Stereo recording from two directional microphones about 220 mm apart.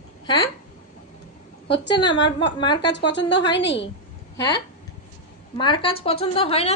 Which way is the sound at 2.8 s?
55° left (ahead or behind).